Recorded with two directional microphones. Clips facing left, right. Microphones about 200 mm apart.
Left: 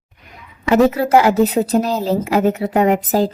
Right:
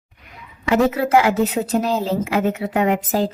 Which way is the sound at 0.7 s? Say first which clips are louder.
Left 3 dB; 40° left (ahead or behind).